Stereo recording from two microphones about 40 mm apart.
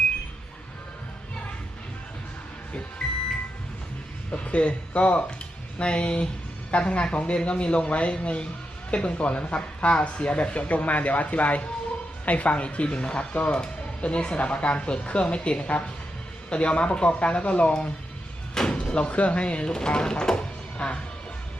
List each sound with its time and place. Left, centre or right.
4.3 s a woman's voice: left